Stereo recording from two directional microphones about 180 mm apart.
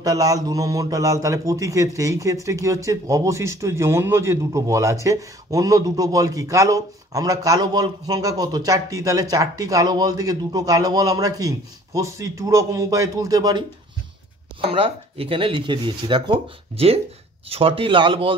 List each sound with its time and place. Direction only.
0.0 s a man's voice: 20° right (ahead or behind)